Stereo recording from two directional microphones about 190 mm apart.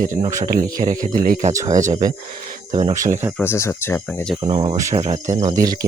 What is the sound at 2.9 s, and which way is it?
Speech, 45° right (ahead or behind).